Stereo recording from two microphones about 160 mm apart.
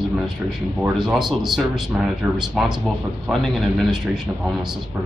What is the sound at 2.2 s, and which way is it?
Speech, 15° right (ahead or behind).